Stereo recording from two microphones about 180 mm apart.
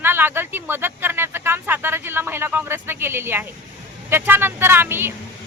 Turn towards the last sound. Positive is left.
turn(degrees=-10)  # may be behind; listen again after turning